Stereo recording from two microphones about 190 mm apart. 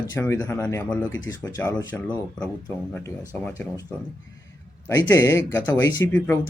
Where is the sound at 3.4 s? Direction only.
10° left (ahead or behind).